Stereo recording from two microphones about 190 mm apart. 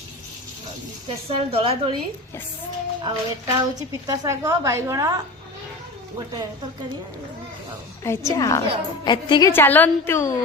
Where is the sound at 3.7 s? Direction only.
20° right (ahead or behind).